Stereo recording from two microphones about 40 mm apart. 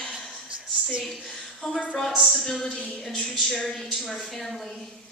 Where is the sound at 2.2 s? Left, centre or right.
Centre.